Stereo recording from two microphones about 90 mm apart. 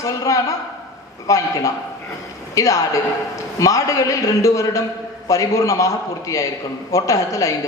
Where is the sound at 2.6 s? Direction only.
35° left (ahead or behind).